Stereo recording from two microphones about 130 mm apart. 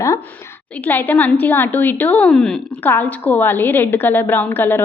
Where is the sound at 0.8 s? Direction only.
15° left (ahead or behind).